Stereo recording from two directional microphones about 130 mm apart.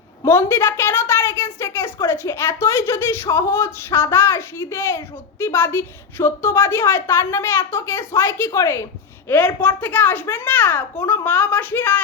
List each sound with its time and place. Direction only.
0.3 s a woman's voice: 20° left (ahead or behind)